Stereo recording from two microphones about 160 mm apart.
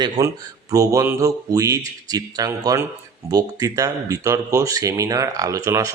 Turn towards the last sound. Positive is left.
turn(degrees=-20)  # may be behind; listen again after turning